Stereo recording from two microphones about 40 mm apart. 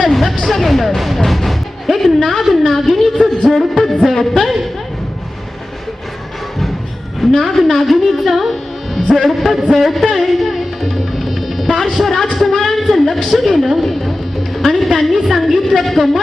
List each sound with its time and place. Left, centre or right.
0.0 s a woman's voice: centre
3.8 s music: centre
7.2 s a woman's voice: centre
11.3 s music: centre
11.9 s a woman's voice: centre
12.1 s music: centre
13.2 s a woman's voice: centre
14.5 s music: centre
14.9 s a woman's voice: centre